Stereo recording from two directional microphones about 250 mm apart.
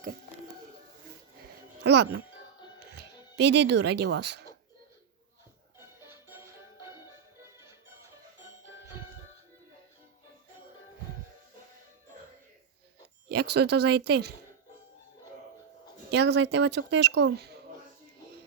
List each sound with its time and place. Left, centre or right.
1.8 s speech: right
6.2 s music: centre
13.2 s a sound: right
13.6 s speech: right
16.1 s speech: right